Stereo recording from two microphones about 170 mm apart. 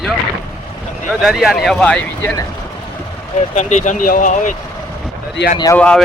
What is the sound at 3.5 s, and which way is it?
Speech, 45° left (ahead or behind).